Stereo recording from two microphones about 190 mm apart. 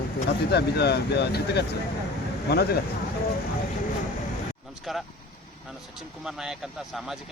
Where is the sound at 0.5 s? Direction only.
60° left (ahead or behind).